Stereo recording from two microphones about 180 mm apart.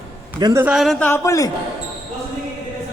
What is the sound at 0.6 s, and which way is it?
Speech, 5° right (ahead or behind).